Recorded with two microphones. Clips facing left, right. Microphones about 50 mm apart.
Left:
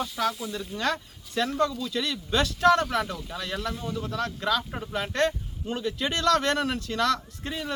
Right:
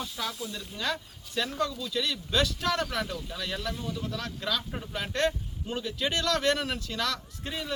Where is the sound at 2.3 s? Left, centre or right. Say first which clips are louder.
Left 8 dB; left.